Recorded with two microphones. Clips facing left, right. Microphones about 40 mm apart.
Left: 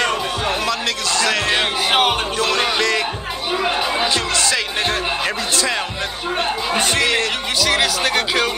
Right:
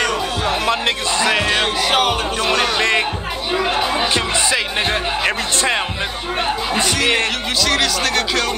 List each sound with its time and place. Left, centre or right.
0.7 s music: right
1.2 s music: centre
1.9 s music: centre
2.8 s music: right
4.1 s music: centre
5.2 s speech: right
7.6 s speech: centre